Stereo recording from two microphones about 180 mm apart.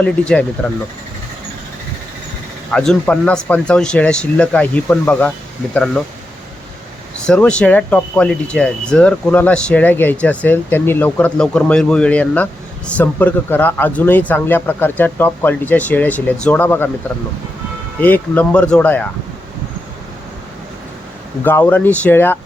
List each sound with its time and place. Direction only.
0.0 s speech: 5° left (ahead or behind)
2.7 s speech: 5° left (ahead or behind)
7.3 s speech: 5° left (ahead or behind)
18.0 s speech: 10° left (ahead or behind)
21.4 s speech: 10° left (ahead or behind)